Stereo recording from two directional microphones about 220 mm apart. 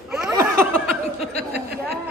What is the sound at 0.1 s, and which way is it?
Chuckle, 10° right (ahead or behind).